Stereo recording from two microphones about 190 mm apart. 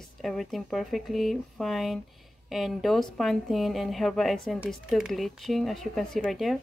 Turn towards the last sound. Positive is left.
turn(degrees=0)  # may be behind; listen again after turning